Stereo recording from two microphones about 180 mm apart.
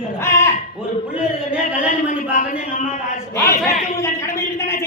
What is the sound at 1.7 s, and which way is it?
Speech, 45° left (ahead or behind).